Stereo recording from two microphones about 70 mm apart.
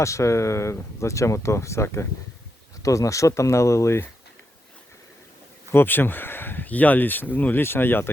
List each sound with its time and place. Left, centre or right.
0.0 s speech: left
5.7 s speech: left